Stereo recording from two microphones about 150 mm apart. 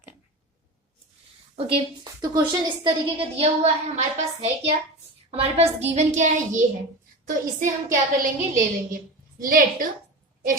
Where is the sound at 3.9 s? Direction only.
50° right (ahead or behind).